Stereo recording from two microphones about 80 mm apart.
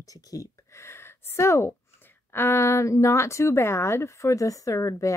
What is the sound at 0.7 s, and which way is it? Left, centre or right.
Gasp, left.